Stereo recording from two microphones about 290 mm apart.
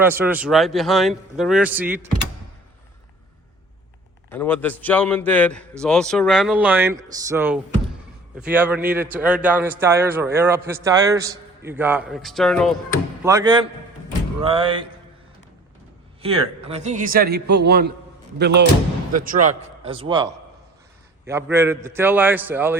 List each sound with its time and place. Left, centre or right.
0.0 s a man's voice: centre
4.3 s a man's voice: centre
13.2 s a man's voice: centre
16.2 s a man's voice: centre